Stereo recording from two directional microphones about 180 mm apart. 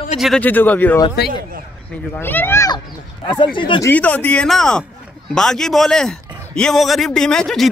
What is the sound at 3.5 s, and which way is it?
Speech, 30° left (ahead or behind).